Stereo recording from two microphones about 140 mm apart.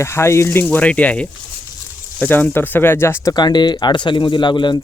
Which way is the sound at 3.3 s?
30° left (ahead or behind).